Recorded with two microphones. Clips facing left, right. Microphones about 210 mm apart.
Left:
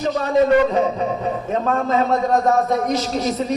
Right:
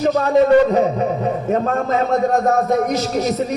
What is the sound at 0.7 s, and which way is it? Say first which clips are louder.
A man's voice: right 3 dB; 40° right (ahead or behind).